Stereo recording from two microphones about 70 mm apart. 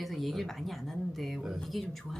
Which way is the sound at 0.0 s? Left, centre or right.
Centre.